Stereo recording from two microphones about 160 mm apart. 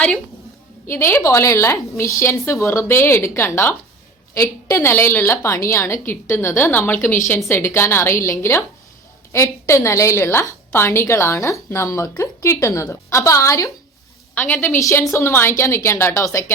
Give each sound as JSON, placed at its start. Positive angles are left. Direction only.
{"t": 0.9, "sound": "a woman's voice", "side_deg": 15}